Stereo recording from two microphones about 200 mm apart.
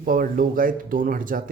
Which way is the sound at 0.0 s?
45° right (ahead or behind).